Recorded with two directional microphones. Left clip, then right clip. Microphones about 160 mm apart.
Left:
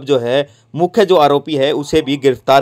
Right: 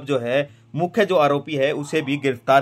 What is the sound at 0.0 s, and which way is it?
Speech, 30° left (ahead or behind).